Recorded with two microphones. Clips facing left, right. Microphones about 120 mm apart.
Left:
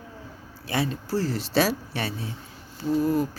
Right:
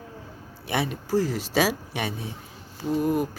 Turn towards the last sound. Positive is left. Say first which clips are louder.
# left 1 dB
turn(degrees=-20)  # may be behind; listen again after turning